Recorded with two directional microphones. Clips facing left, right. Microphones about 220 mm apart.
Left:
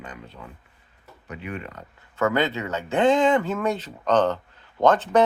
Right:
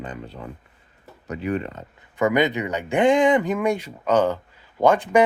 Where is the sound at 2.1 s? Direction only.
15° right (ahead or behind).